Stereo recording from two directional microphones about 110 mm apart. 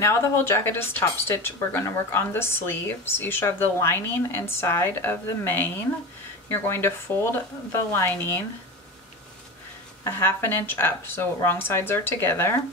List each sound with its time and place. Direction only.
0.0 s speech: 25° left (ahead or behind)
10.0 s speech: 20° left (ahead or behind)